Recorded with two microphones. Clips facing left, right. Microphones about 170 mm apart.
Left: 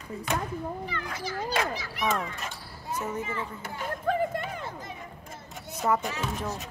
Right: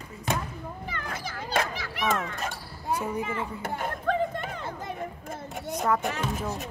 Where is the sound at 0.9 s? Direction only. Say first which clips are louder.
Left 2 dB; 55° right (ahead or behind).